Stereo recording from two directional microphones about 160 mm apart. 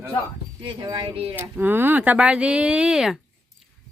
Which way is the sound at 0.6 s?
25° right (ahead or behind).